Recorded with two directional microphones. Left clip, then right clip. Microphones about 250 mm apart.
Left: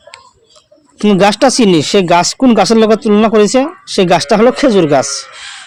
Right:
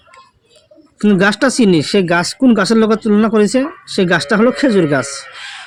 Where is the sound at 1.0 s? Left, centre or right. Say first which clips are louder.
Left 4 dB; centre.